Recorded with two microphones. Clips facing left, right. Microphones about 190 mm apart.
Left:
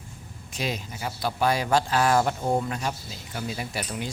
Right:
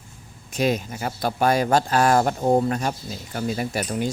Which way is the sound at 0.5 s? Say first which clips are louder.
Right 9 dB; 50° right (ahead or behind).